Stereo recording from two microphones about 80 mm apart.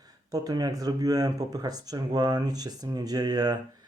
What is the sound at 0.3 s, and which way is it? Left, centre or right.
Speech, right.